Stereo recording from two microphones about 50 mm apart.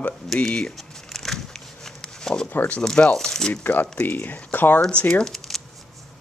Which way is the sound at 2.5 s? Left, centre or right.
Left.